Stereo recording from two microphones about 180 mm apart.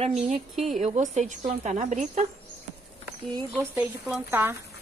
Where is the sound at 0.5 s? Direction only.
Centre (ahead or behind).